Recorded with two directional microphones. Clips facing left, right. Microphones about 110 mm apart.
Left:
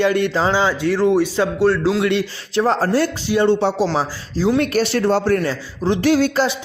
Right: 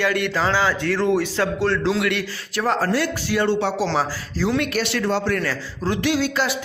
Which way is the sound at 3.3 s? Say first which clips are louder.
Left 5 dB; 20° left (ahead or behind).